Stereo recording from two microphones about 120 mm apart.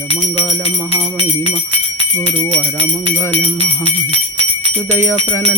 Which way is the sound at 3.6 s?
55° right (ahead or behind).